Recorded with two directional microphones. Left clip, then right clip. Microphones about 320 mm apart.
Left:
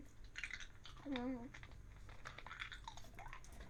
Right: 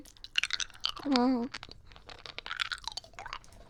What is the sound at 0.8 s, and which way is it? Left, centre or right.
Chewing, right.